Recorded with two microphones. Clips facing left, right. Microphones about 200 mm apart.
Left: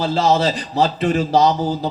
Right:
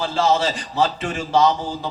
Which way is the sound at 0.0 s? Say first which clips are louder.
Left 3 dB; 35° left (ahead or behind).